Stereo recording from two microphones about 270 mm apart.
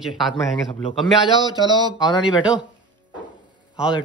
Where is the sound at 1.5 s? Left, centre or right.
Centre.